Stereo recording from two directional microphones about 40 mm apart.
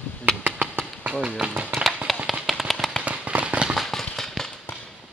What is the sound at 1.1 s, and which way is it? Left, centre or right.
Speech, right.